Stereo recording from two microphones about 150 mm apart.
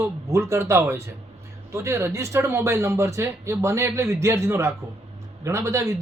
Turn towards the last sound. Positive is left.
turn(degrees=-20)  # may be behind; listen again after turning